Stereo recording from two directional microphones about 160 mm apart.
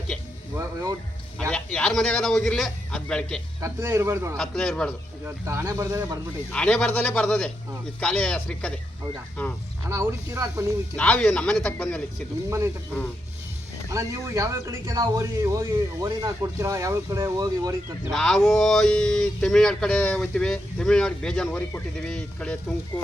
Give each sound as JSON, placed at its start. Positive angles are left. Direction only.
{"t": 0.5, "sound": "music", "side_deg": -20}
{"t": 1.4, "sound": "a man's voice", "side_deg": 5}
{"t": 3.6, "sound": "a man's voice", "side_deg": -15}
{"t": 4.4, "sound": "speech", "side_deg": 5}
{"t": 5.2, "sound": "speech", "side_deg": -15}
{"t": 6.5, "sound": "speech", "side_deg": 5}
{"t": 9.9, "sound": "a man's voice", "side_deg": -15}
{"t": 10.9, "sound": "speech", "side_deg": 10}
{"t": 13.9, "sound": "speech", "side_deg": -20}
{"t": 18.1, "sound": "speech", "side_deg": 5}